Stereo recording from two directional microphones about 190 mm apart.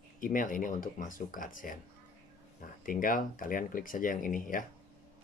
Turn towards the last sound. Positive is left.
turn(degrees=45)  # may be behind; listen again after turning